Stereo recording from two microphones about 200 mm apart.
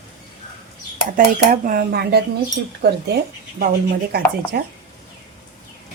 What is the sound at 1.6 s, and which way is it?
Speech, 50° right (ahead or behind).